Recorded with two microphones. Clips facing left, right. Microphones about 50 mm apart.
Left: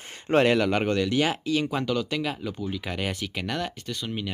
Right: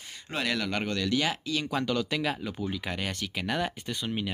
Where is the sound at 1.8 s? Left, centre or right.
Centre.